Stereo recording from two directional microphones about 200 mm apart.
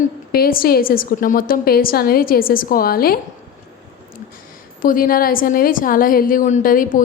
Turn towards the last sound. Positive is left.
turn(degrees=45)  # may be behind; listen again after turning